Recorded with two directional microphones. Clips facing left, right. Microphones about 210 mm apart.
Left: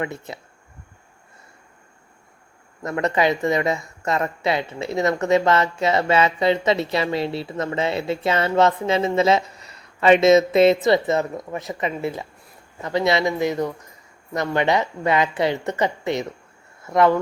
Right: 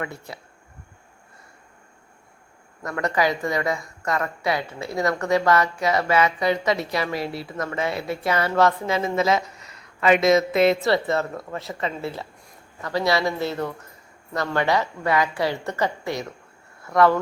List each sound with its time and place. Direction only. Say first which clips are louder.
0.0 s speech: left 4 dB; 20° left (ahead or behind)
2.8 s speech: left 3 dB; 20° left (ahead or behind)